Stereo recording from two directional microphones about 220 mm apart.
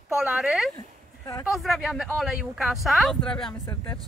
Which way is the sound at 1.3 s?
15° left (ahead or behind).